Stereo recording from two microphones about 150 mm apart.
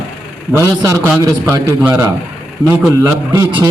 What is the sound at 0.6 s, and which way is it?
A man's voice, 20° right (ahead or behind).